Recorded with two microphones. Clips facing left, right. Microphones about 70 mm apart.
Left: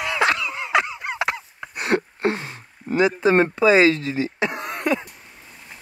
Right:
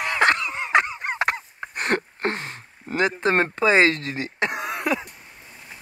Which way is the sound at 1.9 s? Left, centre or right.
Centre.